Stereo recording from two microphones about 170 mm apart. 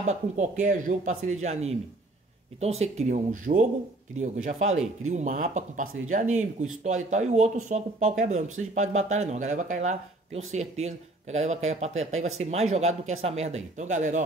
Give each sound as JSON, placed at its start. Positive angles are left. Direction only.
{"t": 0.0, "sound": "speech", "side_deg": -45}